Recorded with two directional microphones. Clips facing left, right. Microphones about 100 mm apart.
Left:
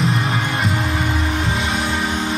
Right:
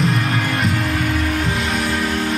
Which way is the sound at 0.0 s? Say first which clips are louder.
Right 1 dB; centre (ahead or behind).